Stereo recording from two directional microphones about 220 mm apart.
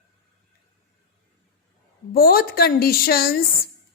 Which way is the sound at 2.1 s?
40° left (ahead or behind).